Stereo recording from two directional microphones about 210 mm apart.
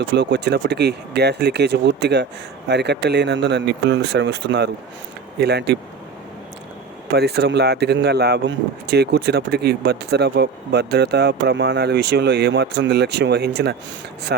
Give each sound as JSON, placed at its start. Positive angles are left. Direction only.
{"t": 0.0, "sound": "speech", "side_deg": -55}
{"t": 7.1, "sound": "speech", "side_deg": -50}